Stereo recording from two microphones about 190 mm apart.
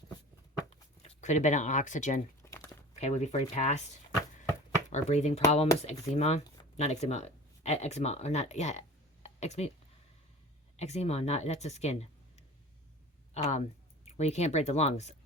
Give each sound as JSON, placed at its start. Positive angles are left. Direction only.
{"t": 0.7, "sound": "speech", "side_deg": 35}
{"t": 2.4, "sound": "crumpling", "side_deg": 15}
{"t": 3.0, "sound": "speech", "side_deg": 35}
{"t": 9.2, "sound": "a sound", "side_deg": 35}
{"t": 10.8, "sound": "speech", "side_deg": 35}
{"t": 13.5, "sound": "speech", "side_deg": 35}